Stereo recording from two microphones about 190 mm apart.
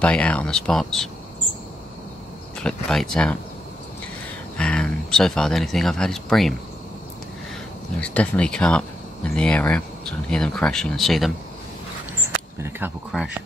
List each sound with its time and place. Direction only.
0.0 s speech: 5° left (ahead or behind)
2.6 s speech: centre (ahead or behind)
4.6 s speech: 5° left (ahead or behind)
8.0 s speech: 5° left (ahead or behind)
12.5 s speech: 10° right (ahead or behind)
13.1 s speech: centre (ahead or behind)